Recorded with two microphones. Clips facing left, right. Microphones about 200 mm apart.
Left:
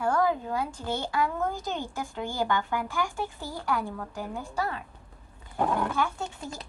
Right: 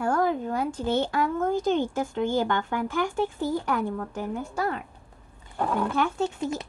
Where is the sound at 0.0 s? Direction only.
50° right (ahead or behind).